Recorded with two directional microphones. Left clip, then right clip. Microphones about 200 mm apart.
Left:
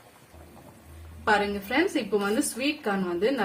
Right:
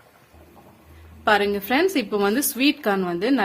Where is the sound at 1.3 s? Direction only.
50° right (ahead or behind).